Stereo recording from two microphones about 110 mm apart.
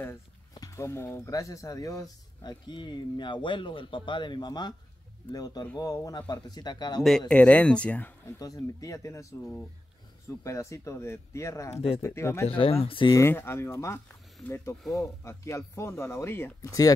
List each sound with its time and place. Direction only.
0.6 s speech: 25° left (ahead or behind)
7.0 s speech: 5° left (ahead or behind)
8.4 s speech: 30° left (ahead or behind)
9.4 s speech: 5° left (ahead or behind)
10.2 s speech: 25° left (ahead or behind)
11.7 s speech: 60° left (ahead or behind)
12.0 s speech: 25° left (ahead or behind)
12.4 s speech: 60° left (ahead or behind)
13.1 s speech: 20° left (ahead or behind)